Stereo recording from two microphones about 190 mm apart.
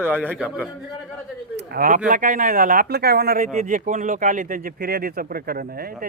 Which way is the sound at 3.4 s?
40° right (ahead or behind).